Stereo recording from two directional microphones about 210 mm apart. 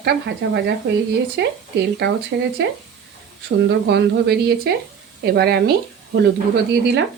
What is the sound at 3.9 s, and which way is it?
Speech, 50° right (ahead or behind).